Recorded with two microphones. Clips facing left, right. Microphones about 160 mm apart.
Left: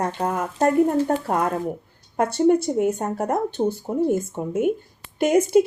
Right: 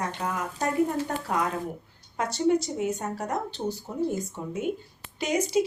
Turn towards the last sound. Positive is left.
turn(degrees=55)  # may be behind; listen again after turning